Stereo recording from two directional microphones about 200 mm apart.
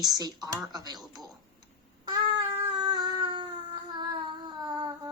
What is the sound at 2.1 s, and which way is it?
Cat, 20° right (ahead or behind).